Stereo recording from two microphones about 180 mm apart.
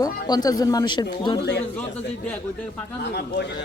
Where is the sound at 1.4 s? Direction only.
70° left (ahead or behind).